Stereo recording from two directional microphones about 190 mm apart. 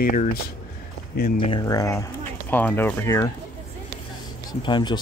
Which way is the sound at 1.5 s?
20° left (ahead or behind).